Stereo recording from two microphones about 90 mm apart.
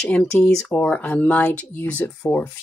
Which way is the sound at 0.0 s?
10° left (ahead or behind).